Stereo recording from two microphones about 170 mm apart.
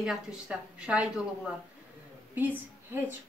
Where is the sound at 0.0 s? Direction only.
5° right (ahead or behind).